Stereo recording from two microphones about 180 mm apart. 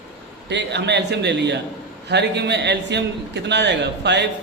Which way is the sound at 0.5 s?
70° right (ahead or behind).